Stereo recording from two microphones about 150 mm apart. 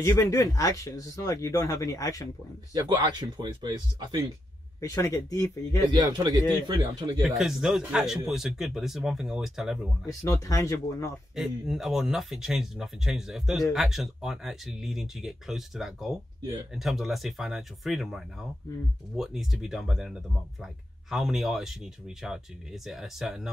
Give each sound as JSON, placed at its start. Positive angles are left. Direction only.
{"t": 0.0, "sound": "speech", "side_deg": 20}
{"t": 2.7, "sound": "speech", "side_deg": -25}
{"t": 4.7, "sound": "speech", "side_deg": 20}
{"t": 5.9, "sound": "speech", "side_deg": -30}
{"t": 7.3, "sound": "speech", "side_deg": -5}
{"t": 10.0, "sound": "speech", "side_deg": 20}
{"t": 11.3, "sound": "speech", "side_deg": -5}